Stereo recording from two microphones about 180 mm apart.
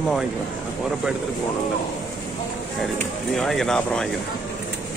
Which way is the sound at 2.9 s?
Centre (ahead or behind).